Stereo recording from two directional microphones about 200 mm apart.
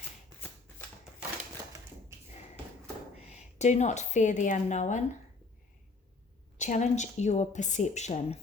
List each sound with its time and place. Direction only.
3.2 s a woman's voice: 35° left (ahead or behind)
6.6 s a woman's voice: 35° left (ahead or behind)